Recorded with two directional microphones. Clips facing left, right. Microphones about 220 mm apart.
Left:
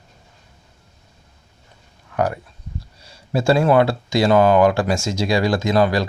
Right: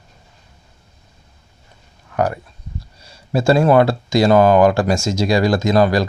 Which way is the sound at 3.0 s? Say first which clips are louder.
Right 2 dB; 40° right (ahead or behind).